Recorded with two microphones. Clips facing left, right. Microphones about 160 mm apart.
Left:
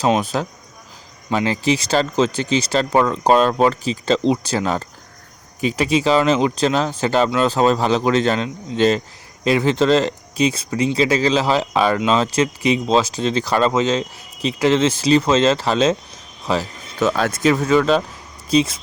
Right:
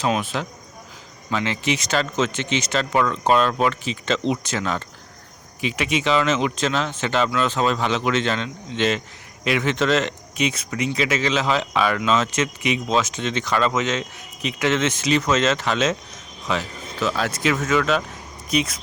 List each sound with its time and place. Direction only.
0.0 s speech: 40° left (ahead or behind)
17.5 s speech: 35° left (ahead or behind)